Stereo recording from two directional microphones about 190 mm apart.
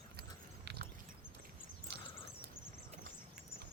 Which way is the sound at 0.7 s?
60° right (ahead or behind).